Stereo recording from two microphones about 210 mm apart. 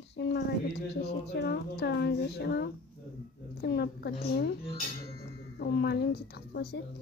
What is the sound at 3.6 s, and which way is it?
Speech, 50° left (ahead or behind).